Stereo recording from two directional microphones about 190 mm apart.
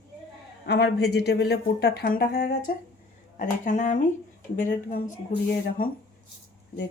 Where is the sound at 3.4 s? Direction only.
40° left (ahead or behind).